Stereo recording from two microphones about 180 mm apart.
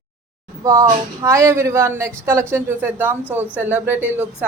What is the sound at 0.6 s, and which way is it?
A woman's voice, 15° right (ahead or behind).